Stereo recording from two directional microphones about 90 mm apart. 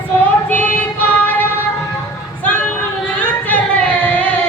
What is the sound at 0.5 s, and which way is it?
Child singing, 20° left (ahead or behind).